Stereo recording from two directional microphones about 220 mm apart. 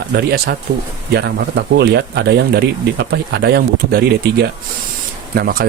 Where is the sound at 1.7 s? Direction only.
50° right (ahead or behind).